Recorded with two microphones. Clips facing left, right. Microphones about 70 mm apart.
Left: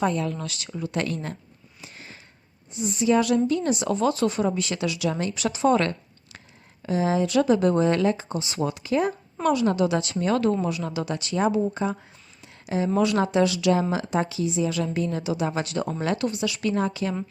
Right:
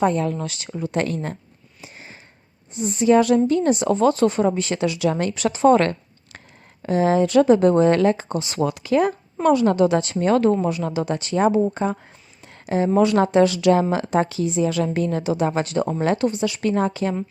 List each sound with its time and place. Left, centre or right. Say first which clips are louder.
0.0 s a woman's voice: right 5 dB; right
0.3 s a woman's voice: right 4 dB; right
1.8 s a sound: right 2 dB; right
2.7 s speech: right 5 dB; right
9.4 s a woman's voice: right 5 dB; right
12.4 s a sound: right 5 dB; right
13.0 s a woman's voice: right 5 dB; right